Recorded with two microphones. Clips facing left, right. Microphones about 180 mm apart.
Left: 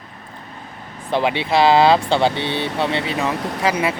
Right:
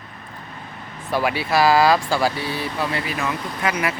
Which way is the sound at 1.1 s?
25° left (ahead or behind).